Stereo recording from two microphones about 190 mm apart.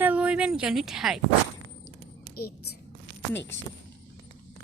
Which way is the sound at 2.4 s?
55° left (ahead or behind).